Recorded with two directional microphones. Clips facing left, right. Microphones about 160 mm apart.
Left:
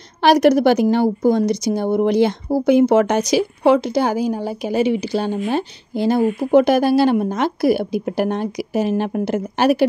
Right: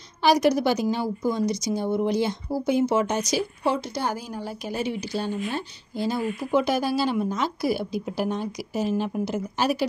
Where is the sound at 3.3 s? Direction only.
85° left.